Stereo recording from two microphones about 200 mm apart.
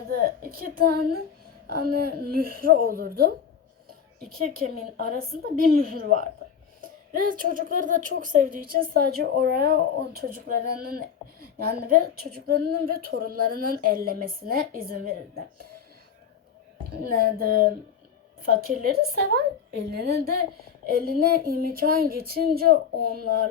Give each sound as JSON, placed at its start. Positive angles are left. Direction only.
{"t": 0.1, "sound": "a woman's voice", "side_deg": -50}
{"t": 17.0, "sound": "speech", "side_deg": -45}